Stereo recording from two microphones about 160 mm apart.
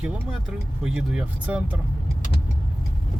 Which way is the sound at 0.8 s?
5° right (ahead or behind).